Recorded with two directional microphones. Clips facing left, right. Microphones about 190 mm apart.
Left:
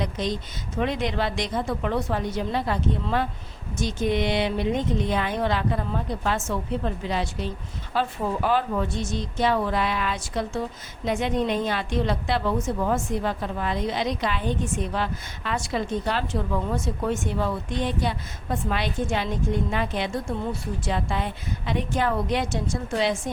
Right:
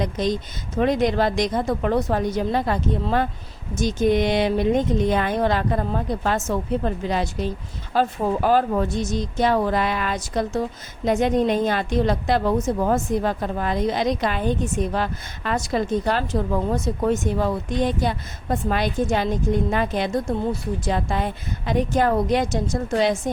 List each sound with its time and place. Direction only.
0.0 s a woman's voice: 45° right (ahead or behind)